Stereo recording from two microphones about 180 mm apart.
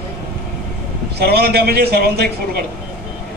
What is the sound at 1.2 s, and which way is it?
A man's voice, 65° right (ahead or behind).